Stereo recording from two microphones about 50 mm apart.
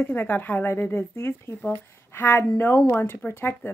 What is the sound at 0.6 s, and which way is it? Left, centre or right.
A woman's voice, left.